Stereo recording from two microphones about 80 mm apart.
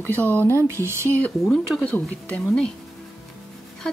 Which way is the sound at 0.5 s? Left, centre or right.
Right.